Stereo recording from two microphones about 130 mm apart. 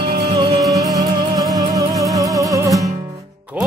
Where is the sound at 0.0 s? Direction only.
50° right (ahead or behind).